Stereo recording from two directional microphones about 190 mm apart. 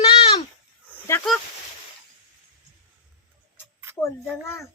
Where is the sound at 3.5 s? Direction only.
15° right (ahead or behind).